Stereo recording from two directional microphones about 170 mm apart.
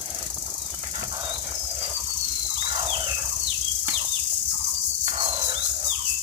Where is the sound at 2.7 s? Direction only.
30° right (ahead or behind).